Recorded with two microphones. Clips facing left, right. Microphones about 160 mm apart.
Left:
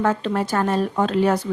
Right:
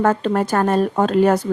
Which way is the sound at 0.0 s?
50° right (ahead or behind).